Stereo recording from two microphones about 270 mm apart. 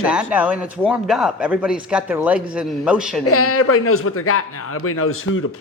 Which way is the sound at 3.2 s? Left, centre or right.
Left.